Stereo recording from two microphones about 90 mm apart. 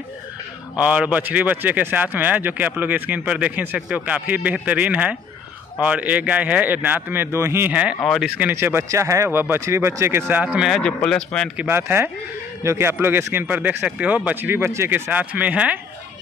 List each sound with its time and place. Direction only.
0.7 s a man's voice: 15° right (ahead or behind)
8.0 s speech: centre (ahead or behind)
8.4 s speech: 20° right (ahead or behind)
10.4 s a man's voice: 10° right (ahead or behind)
10.8 s speech: 10° left (ahead or behind)
11.5 s speech: 20° right (ahead or behind)